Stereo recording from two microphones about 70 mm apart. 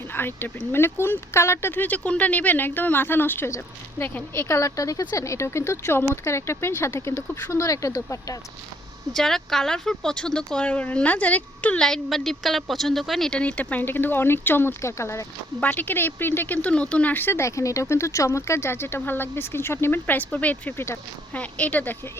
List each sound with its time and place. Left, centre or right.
0.1 s speech: left
4.4 s speech: left
9.1 s speech: centre; by 11.8 s left
11.8 s a woman's voice: centre
13.3 s speech: centre
14.8 s speech: left
15.6 s speech: left
20.7 s speech: left
21.3 s speech: left